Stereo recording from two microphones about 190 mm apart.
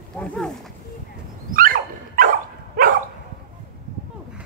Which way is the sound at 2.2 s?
50° right (ahead or behind).